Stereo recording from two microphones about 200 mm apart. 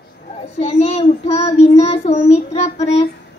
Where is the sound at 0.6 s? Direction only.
35° left (ahead or behind).